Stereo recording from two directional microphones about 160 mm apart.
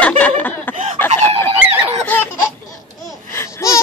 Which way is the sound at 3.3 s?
20° left (ahead or behind).